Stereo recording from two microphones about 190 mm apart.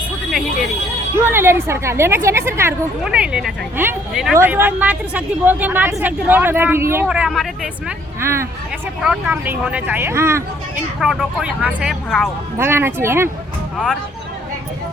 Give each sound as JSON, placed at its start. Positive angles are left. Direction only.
{"t": 1.2, "sound": "a woman's voice", "side_deg": -10}
{"t": 11.0, "sound": "speech", "side_deg": 0}
{"t": 12.5, "sound": "a woman's voice", "side_deg": -10}